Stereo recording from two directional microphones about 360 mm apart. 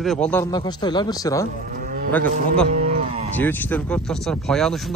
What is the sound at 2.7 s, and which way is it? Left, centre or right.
Livestock, centre.